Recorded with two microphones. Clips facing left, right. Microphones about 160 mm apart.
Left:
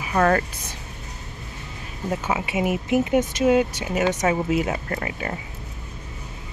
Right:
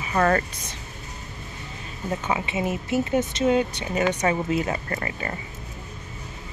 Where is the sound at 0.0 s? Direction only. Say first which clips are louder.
Left 2 dB; centre (ahead or behind).